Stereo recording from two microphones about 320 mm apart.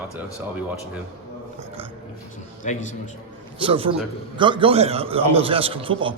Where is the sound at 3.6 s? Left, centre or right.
Centre.